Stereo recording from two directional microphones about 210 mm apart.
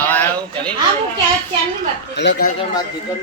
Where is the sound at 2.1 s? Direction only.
55° left (ahead or behind).